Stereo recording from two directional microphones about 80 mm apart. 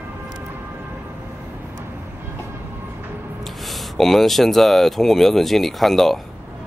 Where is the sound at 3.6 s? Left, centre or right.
Centre.